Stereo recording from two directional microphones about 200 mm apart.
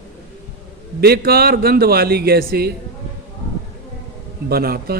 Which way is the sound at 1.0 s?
50° right (ahead or behind).